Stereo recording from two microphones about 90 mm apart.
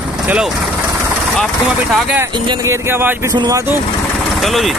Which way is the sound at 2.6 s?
30° right (ahead or behind).